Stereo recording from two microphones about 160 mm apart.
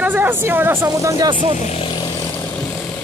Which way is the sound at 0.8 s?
25° right (ahead or behind).